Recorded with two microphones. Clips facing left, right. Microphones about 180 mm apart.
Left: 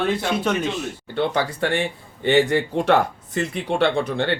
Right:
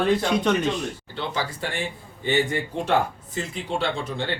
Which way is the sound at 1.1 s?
60° left (ahead or behind).